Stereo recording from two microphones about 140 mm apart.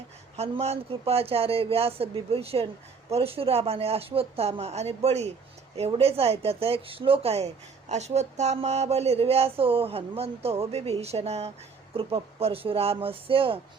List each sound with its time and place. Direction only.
0.3 s speech: 45° right (ahead or behind)